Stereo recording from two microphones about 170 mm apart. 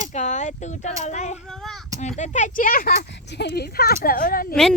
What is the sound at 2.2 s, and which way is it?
Speech, 45° left (ahead or behind).